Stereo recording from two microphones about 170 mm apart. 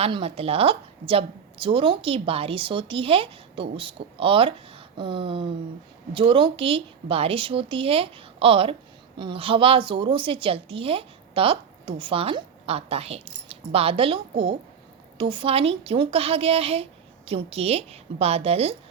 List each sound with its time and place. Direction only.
0.0 s a woman's voice: 35° right (ahead or behind)